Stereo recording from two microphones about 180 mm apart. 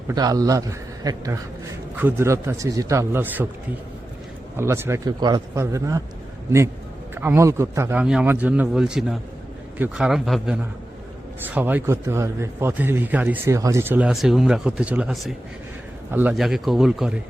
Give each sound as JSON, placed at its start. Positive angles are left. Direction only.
{"t": 0.1, "sound": "a man's voice", "side_deg": -20}
{"t": 4.5, "sound": "a man's voice", "side_deg": -15}
{"t": 7.2, "sound": "a man's voice", "side_deg": -15}